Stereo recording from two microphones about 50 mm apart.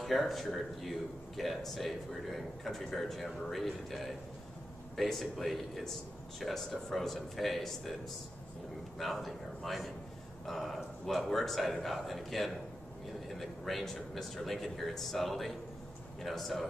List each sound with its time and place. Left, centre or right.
0.0 s speech: centre
8.9 s a man's voice: centre